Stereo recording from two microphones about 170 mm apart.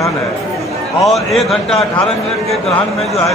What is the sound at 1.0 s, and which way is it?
Speech, centre (ahead or behind).